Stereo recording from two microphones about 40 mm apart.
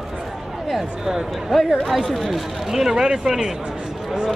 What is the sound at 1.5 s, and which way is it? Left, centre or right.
Speech, centre.